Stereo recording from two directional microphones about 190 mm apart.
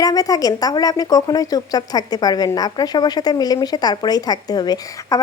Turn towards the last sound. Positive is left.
turn(degrees=15)  # may be behind; listen again after turning